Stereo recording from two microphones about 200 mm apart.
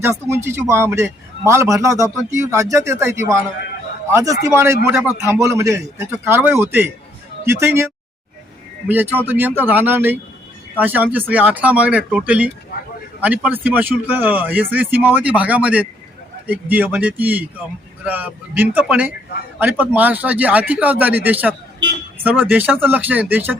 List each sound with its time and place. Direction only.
0.0 s a man's voice: 15° right (ahead or behind)
4.9 s a man's voice: centre (ahead or behind)
5.3 s a man's voice: 15° right (ahead or behind)
8.9 s a man's voice: 10° right (ahead or behind)